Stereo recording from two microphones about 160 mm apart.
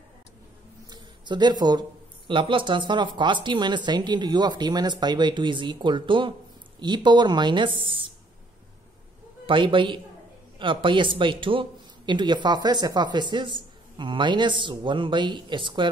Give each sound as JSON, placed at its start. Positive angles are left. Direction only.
{"t": 0.8, "sound": "speech", "side_deg": -25}
{"t": 9.5, "sound": "speech", "side_deg": -30}